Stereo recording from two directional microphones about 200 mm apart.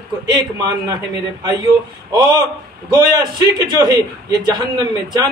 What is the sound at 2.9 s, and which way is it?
A man's voice, 20° right (ahead or behind).